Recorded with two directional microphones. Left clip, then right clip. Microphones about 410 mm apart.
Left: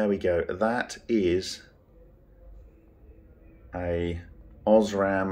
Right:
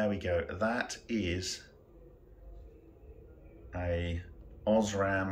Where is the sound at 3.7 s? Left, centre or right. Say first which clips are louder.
Left 6 dB; centre.